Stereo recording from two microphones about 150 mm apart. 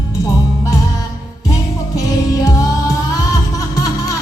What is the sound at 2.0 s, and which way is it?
Music, 25° left (ahead or behind).